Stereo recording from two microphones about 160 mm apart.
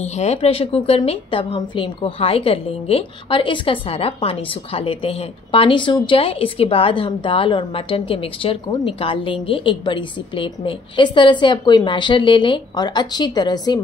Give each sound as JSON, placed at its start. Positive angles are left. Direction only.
{"t": 0.0, "sound": "a woman's voice", "side_deg": 45}